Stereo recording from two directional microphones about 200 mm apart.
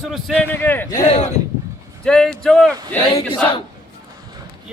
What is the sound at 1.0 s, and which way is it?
Speech, 30° left (ahead or behind).